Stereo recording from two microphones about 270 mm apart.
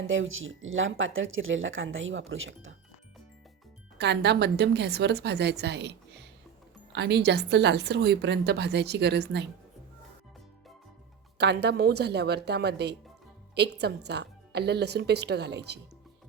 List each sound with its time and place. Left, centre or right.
0.1 s speech: right
3.9 s a woman's voice: right
11.3 s a woman's voice: right